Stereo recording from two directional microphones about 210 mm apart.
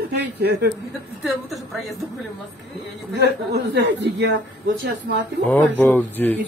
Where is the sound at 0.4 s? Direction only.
50° right (ahead or behind).